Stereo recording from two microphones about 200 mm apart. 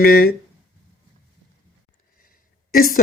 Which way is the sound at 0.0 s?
50° left (ahead or behind).